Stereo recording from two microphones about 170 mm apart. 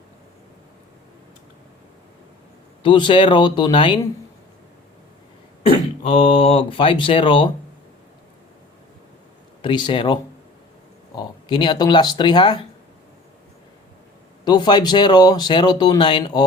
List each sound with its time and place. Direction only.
2.8 s speech: 30° left (ahead or behind)
5.6 s speech: 40° left (ahead or behind)
9.6 s speech: 30° left (ahead or behind)
14.4 s speech: 25° left (ahead or behind)